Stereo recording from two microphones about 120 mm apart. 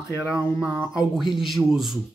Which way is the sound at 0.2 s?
5° right (ahead or behind).